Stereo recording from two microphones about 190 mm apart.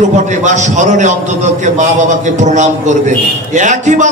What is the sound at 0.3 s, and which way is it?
A man's voice, 40° right (ahead or behind).